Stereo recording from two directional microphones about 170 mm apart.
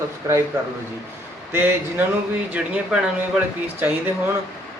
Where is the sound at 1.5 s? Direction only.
10° right (ahead or behind).